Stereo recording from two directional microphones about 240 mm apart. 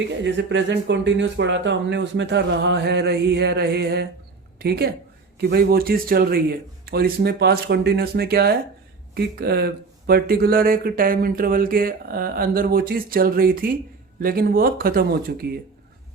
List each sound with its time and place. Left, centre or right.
0.2 s speech: right